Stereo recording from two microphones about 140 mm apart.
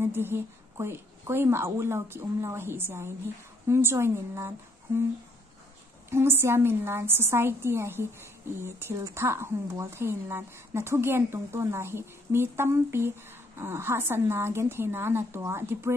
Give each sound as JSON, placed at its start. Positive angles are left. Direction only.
{"t": 0.0, "sound": "a woman's voice", "side_deg": -15}
{"t": 6.0, "sound": "a woman's voice", "side_deg": -20}